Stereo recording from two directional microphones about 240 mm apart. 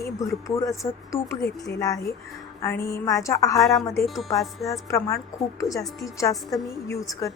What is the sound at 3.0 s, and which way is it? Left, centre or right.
Speech, centre.